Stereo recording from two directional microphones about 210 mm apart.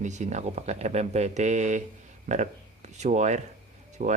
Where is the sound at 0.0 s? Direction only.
35° right (ahead or behind).